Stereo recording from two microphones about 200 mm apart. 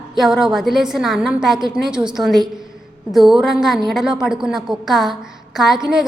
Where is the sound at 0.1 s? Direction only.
Centre (ahead or behind).